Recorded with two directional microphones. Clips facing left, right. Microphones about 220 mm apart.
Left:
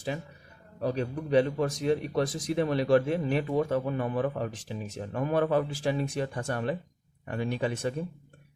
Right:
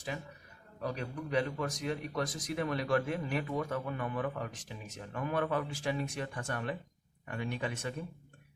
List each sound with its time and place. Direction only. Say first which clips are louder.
0.8 s a man's voice: left 7 dB; 30° left (ahead or behind)